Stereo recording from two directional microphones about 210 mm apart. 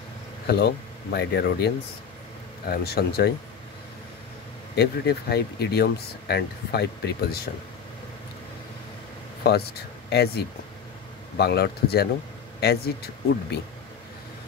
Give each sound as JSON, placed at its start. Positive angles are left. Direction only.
{"t": 0.5, "sound": "speech", "side_deg": 50}
{"t": 4.7, "sound": "speech", "side_deg": 50}
{"t": 9.4, "sound": "speech", "side_deg": 50}